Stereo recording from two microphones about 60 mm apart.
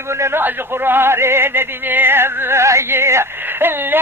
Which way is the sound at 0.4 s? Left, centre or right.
Right.